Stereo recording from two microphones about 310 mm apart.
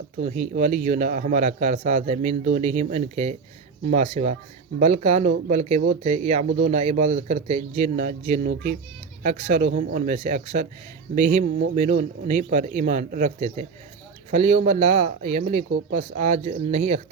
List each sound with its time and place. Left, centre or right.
0.5 s speech: right